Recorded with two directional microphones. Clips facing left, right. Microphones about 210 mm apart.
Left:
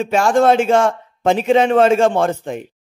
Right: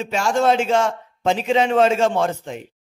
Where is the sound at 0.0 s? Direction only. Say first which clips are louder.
Left 5 dB; 55° left (ahead or behind).